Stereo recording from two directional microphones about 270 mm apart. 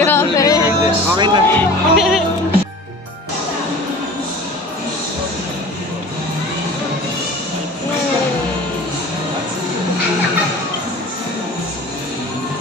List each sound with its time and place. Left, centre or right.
0.0 s music: centre
0.7 s music: centre
1.5 s music: centre